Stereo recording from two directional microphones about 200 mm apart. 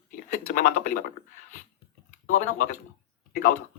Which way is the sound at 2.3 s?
40° left (ahead or behind).